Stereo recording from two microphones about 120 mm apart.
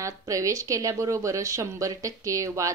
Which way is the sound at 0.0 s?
30° right (ahead or behind).